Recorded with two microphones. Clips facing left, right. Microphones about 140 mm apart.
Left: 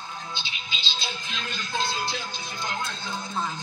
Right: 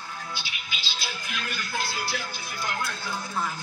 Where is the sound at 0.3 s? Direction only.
20° left (ahead or behind).